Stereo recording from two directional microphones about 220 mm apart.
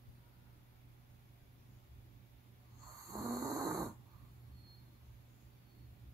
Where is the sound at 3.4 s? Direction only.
15° right (ahead or behind).